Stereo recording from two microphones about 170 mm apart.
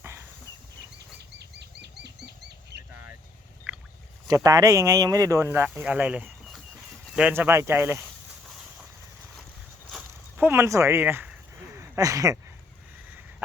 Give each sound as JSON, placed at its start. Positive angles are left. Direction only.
{"t": 1.4, "sound": "bird flight", "side_deg": -80}
{"t": 3.7, "sound": "rowboat", "side_deg": -10}
{"t": 4.3, "sound": "speech", "side_deg": -20}
{"t": 10.3, "sound": "a sound", "side_deg": -15}